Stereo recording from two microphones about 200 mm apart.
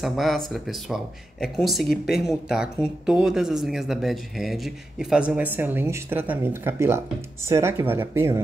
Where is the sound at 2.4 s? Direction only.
5° right (ahead or behind).